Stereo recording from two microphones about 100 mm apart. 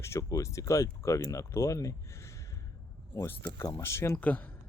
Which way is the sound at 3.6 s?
30° left (ahead or behind).